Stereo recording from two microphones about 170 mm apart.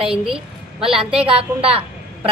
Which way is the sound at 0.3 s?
30° right (ahead or behind).